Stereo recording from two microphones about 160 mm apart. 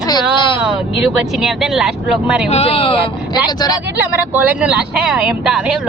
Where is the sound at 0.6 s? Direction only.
5° right (ahead or behind).